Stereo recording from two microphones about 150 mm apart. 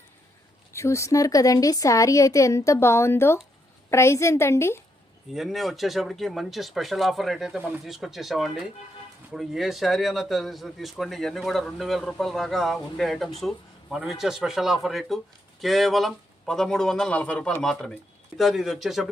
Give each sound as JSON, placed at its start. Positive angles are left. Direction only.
{"t": 0.7, "sound": "a woman's voice", "side_deg": 20}
{"t": 5.3, "sound": "a man's voice", "side_deg": 0}